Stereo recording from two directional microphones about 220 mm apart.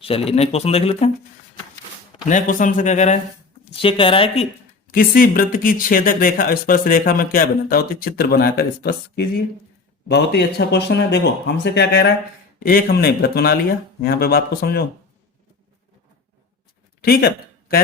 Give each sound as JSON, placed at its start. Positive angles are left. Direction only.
{"t": 0.0, "sound": "speech", "side_deg": 25}
{"t": 2.3, "sound": "speech", "side_deg": 35}
{"t": 4.9, "sound": "speech", "side_deg": 40}
{"t": 17.0, "sound": "speech", "side_deg": 45}